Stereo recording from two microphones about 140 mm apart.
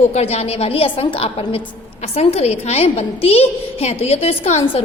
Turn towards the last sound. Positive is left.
turn(degrees=50)  # may be behind; listen again after turning